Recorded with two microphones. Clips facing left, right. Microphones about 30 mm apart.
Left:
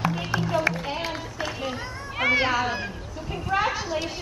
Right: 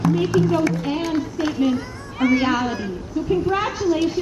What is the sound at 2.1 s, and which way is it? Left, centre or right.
Speech, left.